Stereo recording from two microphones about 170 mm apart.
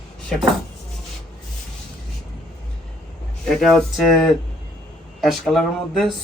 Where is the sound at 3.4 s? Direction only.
5° left (ahead or behind).